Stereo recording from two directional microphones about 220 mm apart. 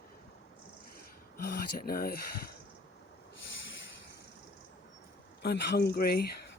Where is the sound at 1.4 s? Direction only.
45° left (ahead or behind).